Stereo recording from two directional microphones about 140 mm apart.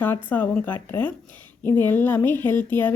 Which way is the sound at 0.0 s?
10° left (ahead or behind).